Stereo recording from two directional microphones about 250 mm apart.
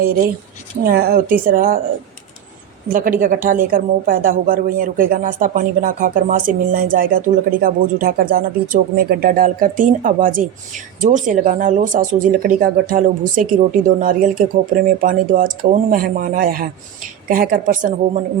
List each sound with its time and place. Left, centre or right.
0.9 s a woman's voice: right
2.9 s a woman's voice: right